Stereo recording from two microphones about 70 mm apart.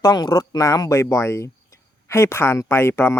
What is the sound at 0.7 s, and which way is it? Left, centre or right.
Speech, left.